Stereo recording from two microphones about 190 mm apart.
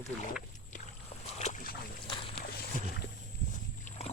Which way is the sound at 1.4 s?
40° left (ahead or behind).